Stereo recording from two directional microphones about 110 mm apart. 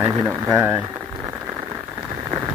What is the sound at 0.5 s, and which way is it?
Speech, 15° right (ahead or behind).